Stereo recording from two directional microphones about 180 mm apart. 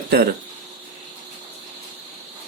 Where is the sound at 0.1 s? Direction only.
60° right (ahead or behind).